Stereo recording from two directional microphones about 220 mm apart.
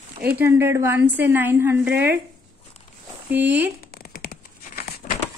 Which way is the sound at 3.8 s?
45° left (ahead or behind).